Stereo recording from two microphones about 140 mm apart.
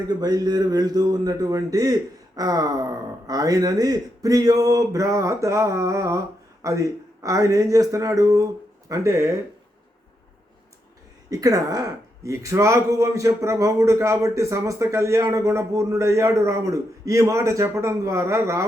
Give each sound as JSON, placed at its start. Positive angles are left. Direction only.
{"t": 0.1, "sound": "speech", "side_deg": -30}
{"t": 11.3, "sound": "speech", "side_deg": -25}